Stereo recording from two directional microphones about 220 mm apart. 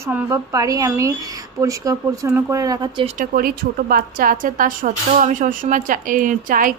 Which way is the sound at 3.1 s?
40° right (ahead or behind).